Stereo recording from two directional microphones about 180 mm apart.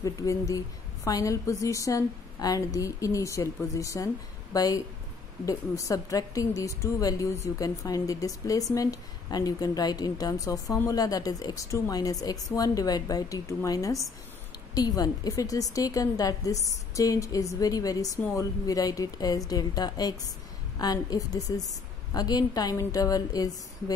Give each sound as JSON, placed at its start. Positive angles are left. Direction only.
{"t": 0.0, "sound": "a woman's voice", "side_deg": 20}